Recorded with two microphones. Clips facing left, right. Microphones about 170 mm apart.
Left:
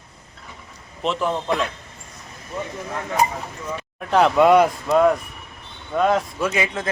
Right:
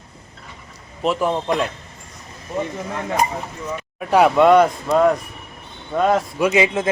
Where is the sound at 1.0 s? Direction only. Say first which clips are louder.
Right 3 dB; 10° right (ahead or behind).